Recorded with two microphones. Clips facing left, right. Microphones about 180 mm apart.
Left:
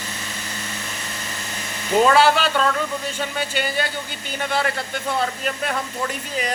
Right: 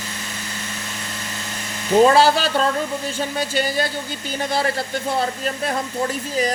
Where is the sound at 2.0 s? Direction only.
35° right (ahead or behind).